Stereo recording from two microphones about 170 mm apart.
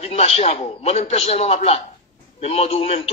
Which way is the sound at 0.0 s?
40° left (ahead or behind).